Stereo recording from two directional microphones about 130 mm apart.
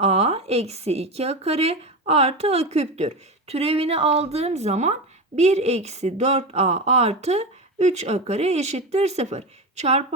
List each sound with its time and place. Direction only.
0.0 s a woman's voice: 55° right (ahead or behind)